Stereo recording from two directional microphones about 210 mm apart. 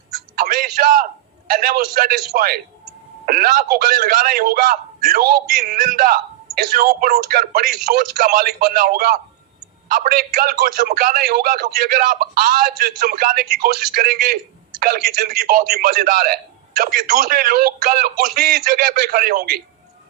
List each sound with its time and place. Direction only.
0.3 s a man's voice: 40° right (ahead or behind)